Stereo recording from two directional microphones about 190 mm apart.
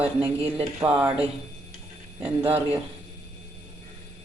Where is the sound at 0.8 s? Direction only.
10° right (ahead or behind).